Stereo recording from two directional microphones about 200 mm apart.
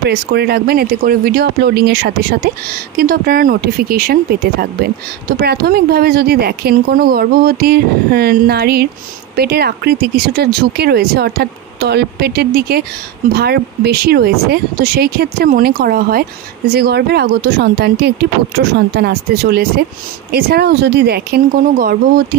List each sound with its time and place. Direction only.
0.0 s speech: 55° right (ahead or behind)